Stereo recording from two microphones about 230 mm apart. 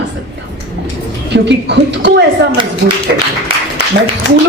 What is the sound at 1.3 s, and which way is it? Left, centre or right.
Speech, right.